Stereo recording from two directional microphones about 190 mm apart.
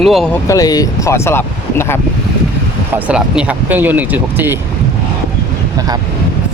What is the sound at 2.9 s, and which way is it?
Speech, 5° right (ahead or behind).